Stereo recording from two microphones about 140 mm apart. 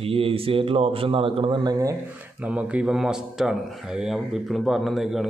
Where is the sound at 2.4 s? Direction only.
10° right (ahead or behind).